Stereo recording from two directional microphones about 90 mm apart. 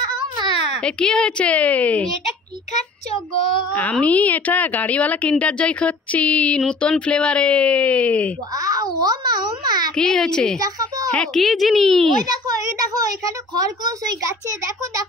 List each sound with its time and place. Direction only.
0.8 s speech: 10° left (ahead or behind)
4.0 s speech: 15° left (ahead or behind)
8.5 s a sound: 45° right (ahead or behind)
9.9 s speech: 5° left (ahead or behind)
10.6 s a woman's voice: 45° right (ahead or behind)
11.1 s speech: 5° left (ahead or behind)
12.1 s speech: 50° right (ahead or behind)